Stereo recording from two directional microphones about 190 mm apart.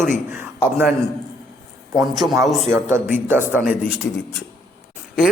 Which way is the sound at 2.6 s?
15° right (ahead or behind).